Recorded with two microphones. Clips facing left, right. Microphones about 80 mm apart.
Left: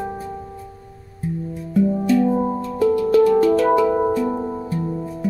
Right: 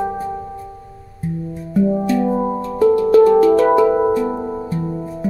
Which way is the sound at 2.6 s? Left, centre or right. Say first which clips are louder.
Right 6 dB; right.